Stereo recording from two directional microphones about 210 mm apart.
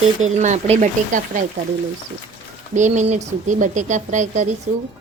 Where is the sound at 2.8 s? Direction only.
35° right (ahead or behind).